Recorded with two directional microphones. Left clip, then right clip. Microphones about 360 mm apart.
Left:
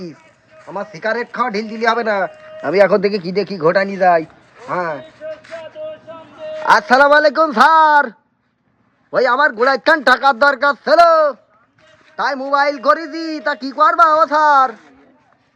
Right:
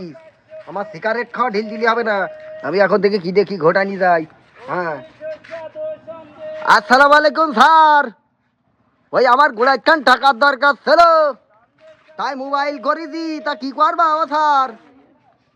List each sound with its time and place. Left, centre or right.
0.6 s a man's voice: centre
3.1 s a man's voice: centre
3.7 s a man's voice: centre
5.8 s vehicle: right
6.6 s a man's voice: centre
7.7 s a man's voice: centre
9.4 s a man's voice: centre
12.1 s a woman's voice: centre